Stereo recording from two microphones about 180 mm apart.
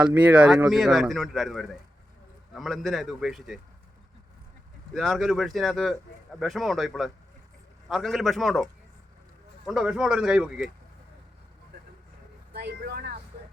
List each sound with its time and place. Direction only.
0.0 s a man's voice: 10° right (ahead or behind)
4.9 s a man's voice: centre (ahead or behind)
12.5 s vehicle: 65° right (ahead or behind)